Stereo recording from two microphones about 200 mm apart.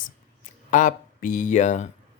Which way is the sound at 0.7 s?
40° left (ahead or behind).